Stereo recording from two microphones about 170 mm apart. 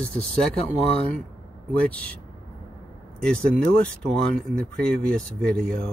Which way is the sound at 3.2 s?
5° left (ahead or behind).